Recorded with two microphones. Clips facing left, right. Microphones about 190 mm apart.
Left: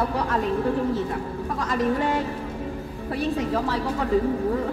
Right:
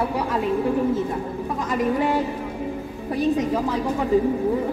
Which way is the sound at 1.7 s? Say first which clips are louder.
Right 2 dB; 10° right (ahead or behind).